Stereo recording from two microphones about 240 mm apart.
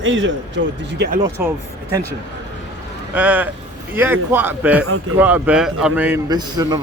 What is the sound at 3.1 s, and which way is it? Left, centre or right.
A man's voice, centre.